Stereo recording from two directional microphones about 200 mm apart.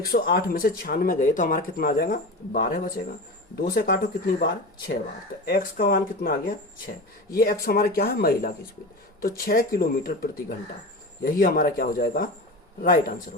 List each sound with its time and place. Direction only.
0.0 s speech: 50° left (ahead or behind)
5.5 s speech: 45° left (ahead or behind)